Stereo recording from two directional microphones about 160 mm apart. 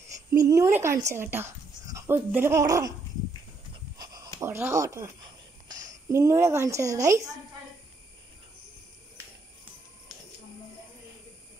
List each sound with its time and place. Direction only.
0.1 s a woman's voice: 20° right (ahead or behind)
4.0 s pant: 25° right (ahead or behind)
4.4 s speech: 15° right (ahead or behind)
5.7 s a sound: 55° right (ahead or behind)
6.0 s a woman's voice: 20° right (ahead or behind)